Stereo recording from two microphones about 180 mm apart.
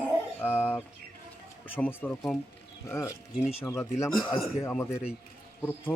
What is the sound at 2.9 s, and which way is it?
Speech, 15° left (ahead or behind).